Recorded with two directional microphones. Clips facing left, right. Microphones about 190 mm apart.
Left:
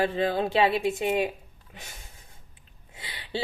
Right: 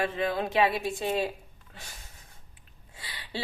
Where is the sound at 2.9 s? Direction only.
25° left (ahead or behind).